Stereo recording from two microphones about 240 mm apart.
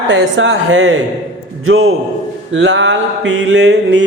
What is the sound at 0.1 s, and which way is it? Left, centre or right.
Mantra, right.